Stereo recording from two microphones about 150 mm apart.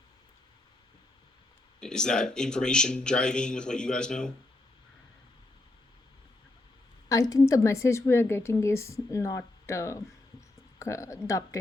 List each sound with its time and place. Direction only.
1.8 s speech: 5° left (ahead or behind)
7.1 s a woman's voice: 25° left (ahead or behind)